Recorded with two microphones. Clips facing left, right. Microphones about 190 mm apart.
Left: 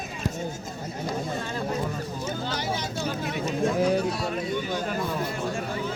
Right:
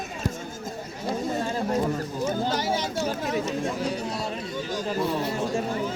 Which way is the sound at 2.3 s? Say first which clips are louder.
Right 5 dB; 40° right (ahead or behind).